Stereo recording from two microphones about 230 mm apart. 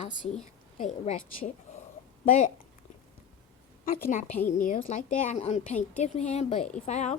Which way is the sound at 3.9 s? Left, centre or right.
Left.